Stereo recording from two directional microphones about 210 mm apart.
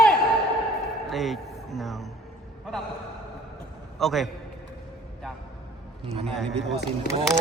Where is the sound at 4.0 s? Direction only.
Centre (ahead or behind).